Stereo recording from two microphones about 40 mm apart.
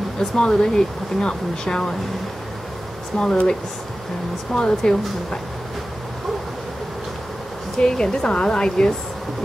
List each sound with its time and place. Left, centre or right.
0.4 s speech: centre
3.2 s speech: centre
4.6 s speech: centre
7.7 s speech: centre